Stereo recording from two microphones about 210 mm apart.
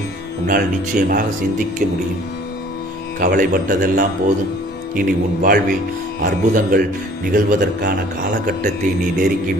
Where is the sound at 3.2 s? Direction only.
40° right (ahead or behind).